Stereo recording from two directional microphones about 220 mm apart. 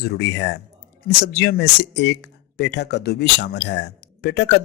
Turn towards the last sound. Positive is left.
turn(degrees=50)  # may be behind; listen again after turning